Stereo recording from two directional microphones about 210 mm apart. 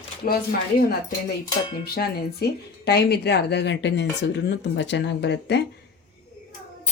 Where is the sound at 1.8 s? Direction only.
50° left (ahead or behind).